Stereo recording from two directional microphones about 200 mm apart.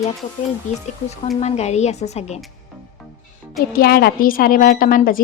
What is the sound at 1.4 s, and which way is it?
Speech, 35° left (ahead or behind).